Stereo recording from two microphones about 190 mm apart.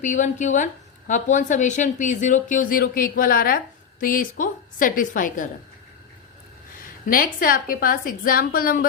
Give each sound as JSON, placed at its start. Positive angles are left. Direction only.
{"t": 0.0, "sound": "a woman's voice", "side_deg": 40}
{"t": 7.0, "sound": "a woman's voice", "side_deg": 50}